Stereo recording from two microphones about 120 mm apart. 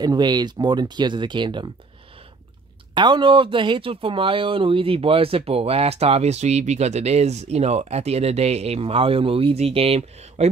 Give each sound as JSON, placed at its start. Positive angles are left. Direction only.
{"t": 0.0, "sound": "speech", "side_deg": -35}
{"t": 2.9, "sound": "speech", "side_deg": -40}